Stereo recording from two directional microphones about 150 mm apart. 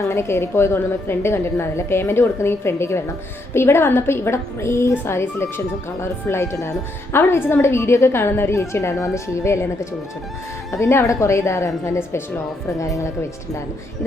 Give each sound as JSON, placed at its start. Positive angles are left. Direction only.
{"t": 0.0, "sound": "a woman's voice", "side_deg": 15}
{"t": 10.7, "sound": "speech", "side_deg": 20}